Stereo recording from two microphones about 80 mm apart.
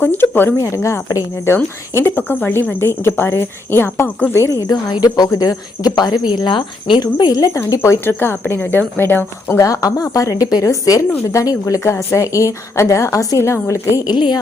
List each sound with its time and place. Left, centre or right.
0.0 s speech: left
0.5 s a woman's voice: left
4.7 s speech: left
7.0 s a woman's voice: left
7.7 s speech: left
9.6 s a woman's voice: left
14.1 s speech: left